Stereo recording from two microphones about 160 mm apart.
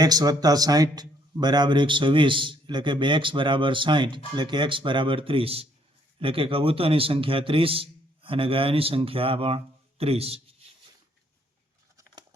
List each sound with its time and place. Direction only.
0.0 s a man's voice: 25° right (ahead or behind)